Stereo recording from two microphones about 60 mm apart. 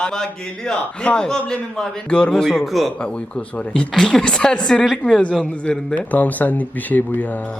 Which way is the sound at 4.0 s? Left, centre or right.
Centre.